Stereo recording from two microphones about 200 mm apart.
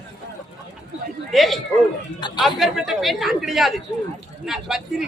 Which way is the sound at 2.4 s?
Centre (ahead or behind).